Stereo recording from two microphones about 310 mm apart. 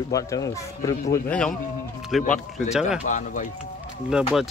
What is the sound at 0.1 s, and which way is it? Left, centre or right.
Speech, centre.